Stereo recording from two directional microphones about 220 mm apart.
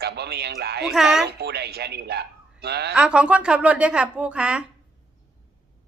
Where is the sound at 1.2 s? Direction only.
50° right (ahead or behind).